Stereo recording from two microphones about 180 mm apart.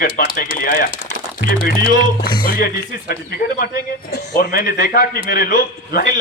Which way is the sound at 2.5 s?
55° left (ahead or behind).